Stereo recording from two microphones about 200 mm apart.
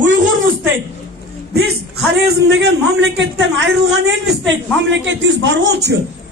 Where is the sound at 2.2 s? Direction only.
55° right (ahead or behind).